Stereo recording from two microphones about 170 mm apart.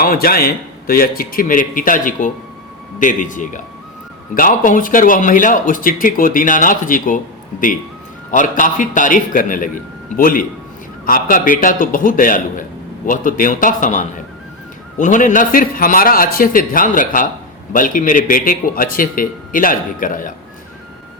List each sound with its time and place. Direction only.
0.0 s a man's voice: 60° left (ahead or behind)
8.3 s a man's voice: 50° left (ahead or behind)